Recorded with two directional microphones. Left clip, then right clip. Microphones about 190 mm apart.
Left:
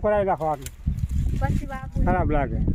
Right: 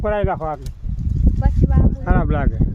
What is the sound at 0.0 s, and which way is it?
Speech, 5° right (ahead or behind).